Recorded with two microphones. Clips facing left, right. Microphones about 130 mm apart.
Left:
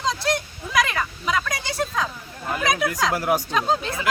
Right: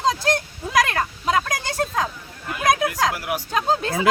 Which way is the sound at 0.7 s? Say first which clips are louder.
Right 2 dB; 50° right (ahead or behind).